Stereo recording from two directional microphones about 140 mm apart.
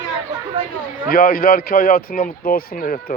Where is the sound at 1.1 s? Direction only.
90° left.